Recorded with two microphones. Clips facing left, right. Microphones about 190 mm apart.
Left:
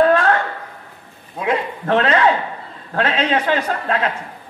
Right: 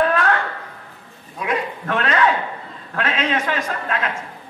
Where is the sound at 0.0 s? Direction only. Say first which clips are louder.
Left 4 dB; 30° left (ahead or behind).